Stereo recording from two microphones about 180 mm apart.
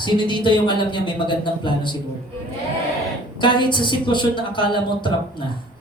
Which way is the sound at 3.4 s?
25° left (ahead or behind).